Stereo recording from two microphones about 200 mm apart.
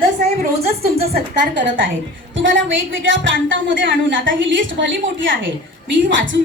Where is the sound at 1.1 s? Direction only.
60° right (ahead or behind).